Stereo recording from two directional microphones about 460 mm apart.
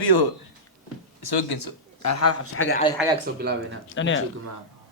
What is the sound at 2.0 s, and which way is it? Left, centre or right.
Speech, left.